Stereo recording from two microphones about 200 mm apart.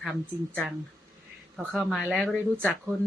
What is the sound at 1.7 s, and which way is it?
Speech, centre (ahead or behind).